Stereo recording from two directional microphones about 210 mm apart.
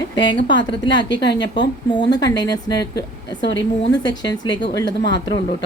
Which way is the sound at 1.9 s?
20° left (ahead or behind).